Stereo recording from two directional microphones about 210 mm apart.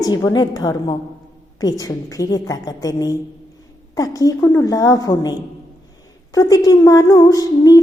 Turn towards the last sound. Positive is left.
turn(degrees=20)  # may be behind; listen again after turning